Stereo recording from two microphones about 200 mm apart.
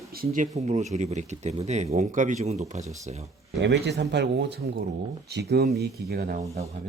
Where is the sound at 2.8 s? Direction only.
15° right (ahead or behind).